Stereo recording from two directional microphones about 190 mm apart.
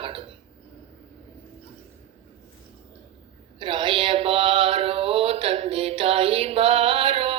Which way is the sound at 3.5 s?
25° right (ahead or behind).